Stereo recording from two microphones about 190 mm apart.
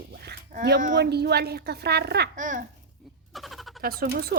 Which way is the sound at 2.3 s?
45° right (ahead or behind).